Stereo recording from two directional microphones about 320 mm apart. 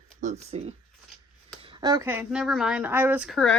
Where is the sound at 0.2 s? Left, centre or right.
Right; by 3.6 s centre.